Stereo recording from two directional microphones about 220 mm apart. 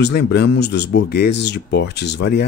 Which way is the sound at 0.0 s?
50° left (ahead or behind).